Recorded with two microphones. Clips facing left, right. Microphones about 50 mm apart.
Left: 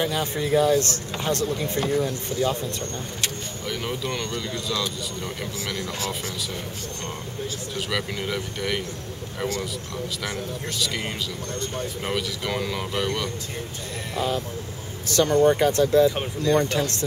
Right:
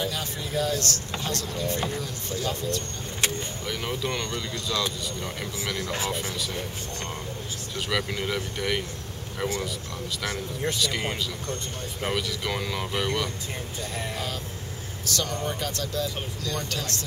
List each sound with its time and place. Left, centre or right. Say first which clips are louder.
0.0 s speech: left 6 dB; left
3.6 s speech: left 2 dB; centre
5.9 s speech: even; right
7.7 s speech: right 1 dB; centre
10.8 s speech: even; centre
14.1 s speech: left 7 dB; left